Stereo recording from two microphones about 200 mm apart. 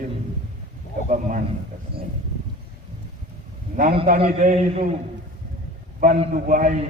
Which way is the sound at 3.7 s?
40° right (ahead or behind).